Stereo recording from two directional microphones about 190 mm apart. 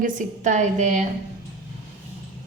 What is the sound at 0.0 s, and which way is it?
A woman's voice, 40° right (ahead or behind).